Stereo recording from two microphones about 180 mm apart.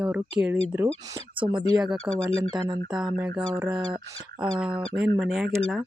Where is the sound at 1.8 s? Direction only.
5° right (ahead or behind).